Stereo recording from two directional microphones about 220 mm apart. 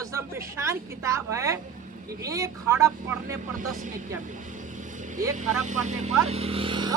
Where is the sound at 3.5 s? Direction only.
35° right (ahead or behind).